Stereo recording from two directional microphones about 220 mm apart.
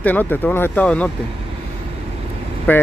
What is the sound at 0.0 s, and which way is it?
Speech, 10° left (ahead or behind).